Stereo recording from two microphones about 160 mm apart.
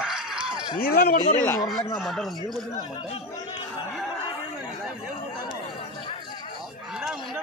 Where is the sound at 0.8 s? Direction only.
70° left (ahead or behind).